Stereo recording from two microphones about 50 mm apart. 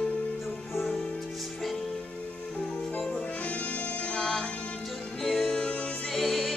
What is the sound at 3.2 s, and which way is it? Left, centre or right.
Music, left.